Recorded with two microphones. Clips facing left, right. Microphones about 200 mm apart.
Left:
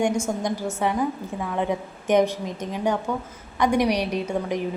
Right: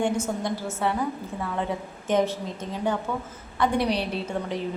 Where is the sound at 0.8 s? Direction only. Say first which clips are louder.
Left 2 dB; 15° left (ahead or behind).